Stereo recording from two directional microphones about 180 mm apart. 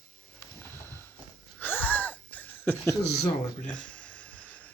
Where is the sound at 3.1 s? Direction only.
35° left (ahead or behind).